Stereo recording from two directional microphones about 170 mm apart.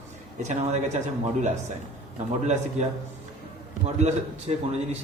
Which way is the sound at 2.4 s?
40° right (ahead or behind).